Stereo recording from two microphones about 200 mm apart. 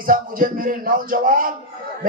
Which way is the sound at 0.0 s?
45° right (ahead or behind).